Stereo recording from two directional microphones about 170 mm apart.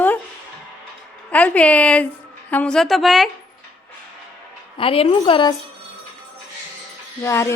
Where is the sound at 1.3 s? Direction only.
10° left (ahead or behind).